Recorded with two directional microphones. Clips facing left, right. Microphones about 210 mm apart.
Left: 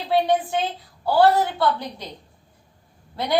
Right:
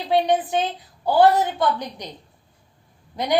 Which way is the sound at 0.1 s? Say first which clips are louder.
Right 1 dB; 15° right (ahead or behind).